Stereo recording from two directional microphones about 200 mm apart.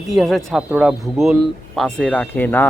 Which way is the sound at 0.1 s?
Centre (ahead or behind).